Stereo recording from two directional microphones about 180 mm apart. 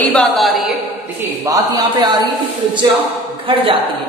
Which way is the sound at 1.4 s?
20° right (ahead or behind).